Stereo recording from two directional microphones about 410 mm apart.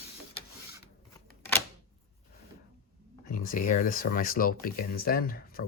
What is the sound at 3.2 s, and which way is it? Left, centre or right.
Speech, centre.